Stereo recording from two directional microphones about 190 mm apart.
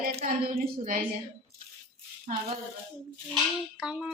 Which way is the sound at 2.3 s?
40° right (ahead or behind).